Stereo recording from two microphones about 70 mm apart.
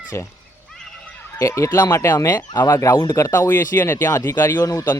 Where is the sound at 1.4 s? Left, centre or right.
Left.